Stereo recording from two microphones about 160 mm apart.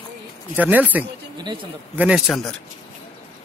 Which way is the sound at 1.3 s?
30° right (ahead or behind).